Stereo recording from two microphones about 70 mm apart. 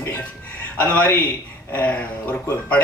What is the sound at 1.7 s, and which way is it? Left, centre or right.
A man's voice, left.